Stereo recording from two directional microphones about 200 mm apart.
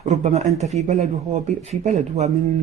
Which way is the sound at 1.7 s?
35° right (ahead or behind).